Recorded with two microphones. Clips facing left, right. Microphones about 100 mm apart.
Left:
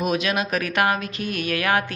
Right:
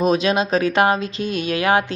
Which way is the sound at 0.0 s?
30° right (ahead or behind).